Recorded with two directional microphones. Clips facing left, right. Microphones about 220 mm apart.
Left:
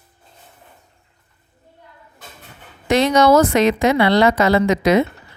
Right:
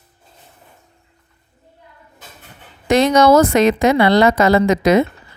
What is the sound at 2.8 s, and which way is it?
A woman's voice, 45° right (ahead or behind).